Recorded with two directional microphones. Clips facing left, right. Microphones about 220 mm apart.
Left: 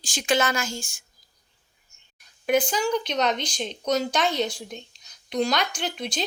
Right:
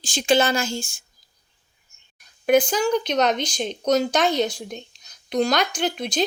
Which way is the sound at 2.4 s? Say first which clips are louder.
Right 4 dB; 45° right (ahead or behind).